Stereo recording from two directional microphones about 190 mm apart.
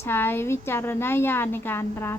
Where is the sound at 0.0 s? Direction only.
10° left (ahead or behind).